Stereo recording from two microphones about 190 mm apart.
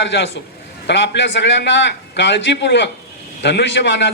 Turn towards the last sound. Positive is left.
turn(degrees=70)  # may be behind; listen again after turning